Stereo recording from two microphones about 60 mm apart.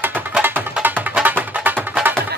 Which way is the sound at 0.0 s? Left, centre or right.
Right.